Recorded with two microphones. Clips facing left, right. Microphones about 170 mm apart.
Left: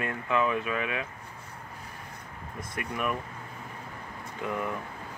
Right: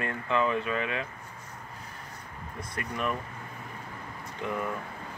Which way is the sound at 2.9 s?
10° left (ahead or behind).